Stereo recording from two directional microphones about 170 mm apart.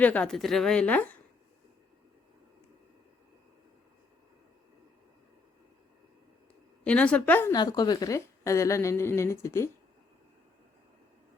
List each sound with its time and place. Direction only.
0.0 s a woman's voice: 10° left (ahead or behind)
6.8 s a woman's voice: 5° left (ahead or behind)
7.5 s a woman's voice: 25° left (ahead or behind)